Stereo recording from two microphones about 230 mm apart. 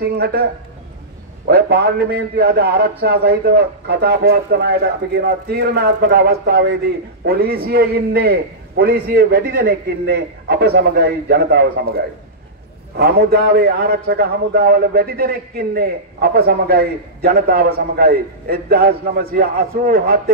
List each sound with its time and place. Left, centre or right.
0.0 s a man's voice: right
1.5 s a man's voice: right
12.9 s a man's voice: right